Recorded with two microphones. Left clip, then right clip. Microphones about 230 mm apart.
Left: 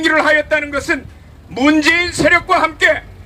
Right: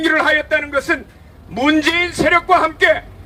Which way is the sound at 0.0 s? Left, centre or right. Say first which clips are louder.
Left 2 dB; left.